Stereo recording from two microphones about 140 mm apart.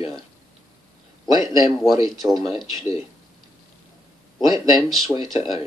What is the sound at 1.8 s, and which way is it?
Speech, centre (ahead or behind).